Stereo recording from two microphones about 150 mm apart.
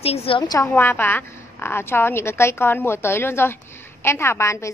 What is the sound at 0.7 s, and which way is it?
A woman's voice, 15° left (ahead or behind).